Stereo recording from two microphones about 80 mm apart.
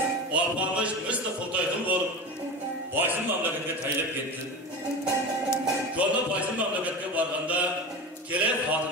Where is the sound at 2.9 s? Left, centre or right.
Right.